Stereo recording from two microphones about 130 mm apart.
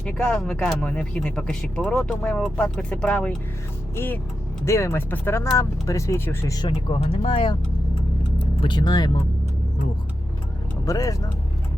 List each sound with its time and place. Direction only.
0.0 s speech: 5° left (ahead or behind)
6.6 s speech: 40° left (ahead or behind)
8.6 s speech: 35° left (ahead or behind)
10.8 s speech: 25° left (ahead or behind)